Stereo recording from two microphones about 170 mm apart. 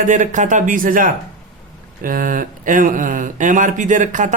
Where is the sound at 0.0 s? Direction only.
50° right (ahead or behind).